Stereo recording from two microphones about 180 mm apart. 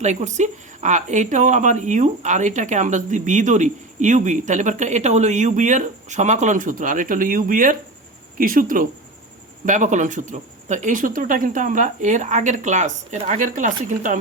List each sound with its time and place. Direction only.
0.0 s speech: 40° right (ahead or behind)